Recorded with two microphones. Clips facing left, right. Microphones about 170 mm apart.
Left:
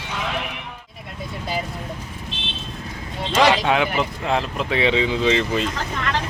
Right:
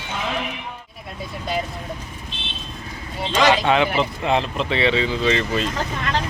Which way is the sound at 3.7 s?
5° left (ahead or behind).